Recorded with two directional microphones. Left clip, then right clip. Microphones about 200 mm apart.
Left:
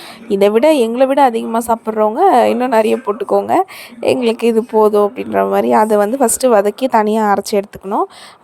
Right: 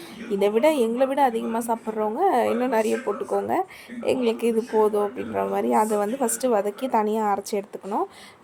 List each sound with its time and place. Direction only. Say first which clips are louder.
0.3 s a woman's voice: left 10 dB; 40° left (ahead or behind)